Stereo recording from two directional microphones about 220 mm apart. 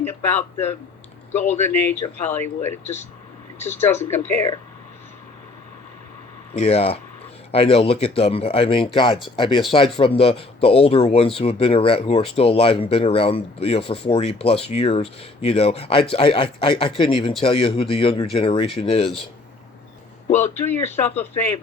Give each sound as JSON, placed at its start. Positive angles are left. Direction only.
{"t": 0.0, "sound": "speech", "side_deg": 10}
{"t": 6.5, "sound": "speech", "side_deg": 30}
{"t": 20.6, "sound": "speech", "side_deg": 10}